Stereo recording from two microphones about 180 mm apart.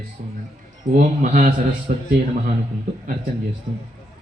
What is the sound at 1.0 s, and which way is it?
Mantra, 50° right (ahead or behind).